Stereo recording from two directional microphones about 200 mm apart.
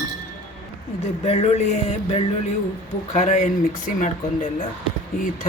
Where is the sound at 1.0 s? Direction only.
30° left (ahead or behind).